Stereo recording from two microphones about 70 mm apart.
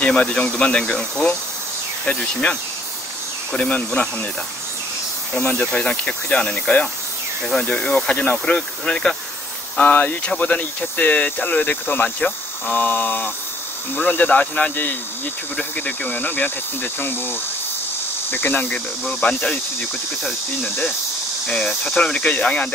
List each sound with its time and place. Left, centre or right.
0.0 s speech: centre
3.7 s speech: centre
5.4 s speech: left
19.0 s speech: centre
21.5 s speech: centre